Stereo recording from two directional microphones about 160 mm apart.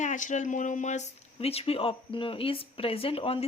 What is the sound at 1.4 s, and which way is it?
Speech, 40° left (ahead or behind).